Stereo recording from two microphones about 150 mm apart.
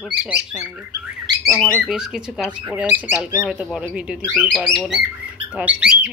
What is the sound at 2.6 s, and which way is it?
Speech, 15° right (ahead or behind).